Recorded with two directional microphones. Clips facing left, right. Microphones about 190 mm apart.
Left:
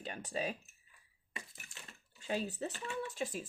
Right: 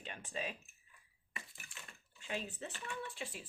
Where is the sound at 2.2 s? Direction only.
40° left (ahead or behind).